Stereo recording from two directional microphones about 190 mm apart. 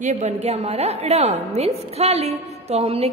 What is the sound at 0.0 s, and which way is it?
A woman's voice, 40° right (ahead or behind).